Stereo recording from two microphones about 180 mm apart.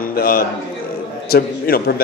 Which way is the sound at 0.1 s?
55° left (ahead or behind).